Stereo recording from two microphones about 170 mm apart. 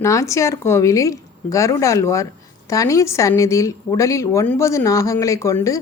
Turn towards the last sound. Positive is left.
turn(degrees=15)  # may be behind; listen again after turning